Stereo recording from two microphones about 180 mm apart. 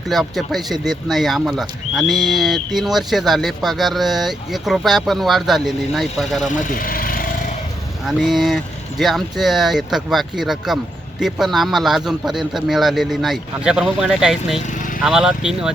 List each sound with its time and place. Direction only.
0.1 s speech: centre (ahead or behind)
6.5 s speech: 50° left (ahead or behind)
8.0 s speech: centre (ahead or behind)
14.7 s vehicle: 45° left (ahead or behind)
15.0 s speech: 5° right (ahead or behind)